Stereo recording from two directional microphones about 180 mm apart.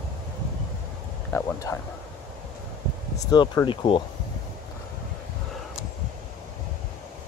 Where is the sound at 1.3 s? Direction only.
15° left (ahead or behind).